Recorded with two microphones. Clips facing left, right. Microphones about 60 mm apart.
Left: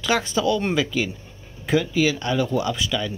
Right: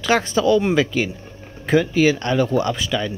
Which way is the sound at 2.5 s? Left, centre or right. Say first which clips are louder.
Right 3 dB; right.